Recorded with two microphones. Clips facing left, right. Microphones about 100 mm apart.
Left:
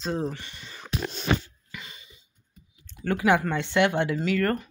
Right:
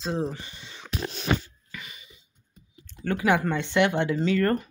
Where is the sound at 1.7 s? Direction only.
25° left (ahead or behind).